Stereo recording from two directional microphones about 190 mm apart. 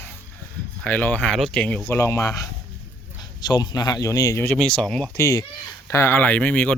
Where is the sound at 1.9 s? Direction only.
15° left (ahead or behind).